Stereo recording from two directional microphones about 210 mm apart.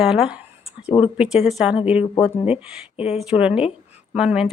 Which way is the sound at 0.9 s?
25° left (ahead or behind).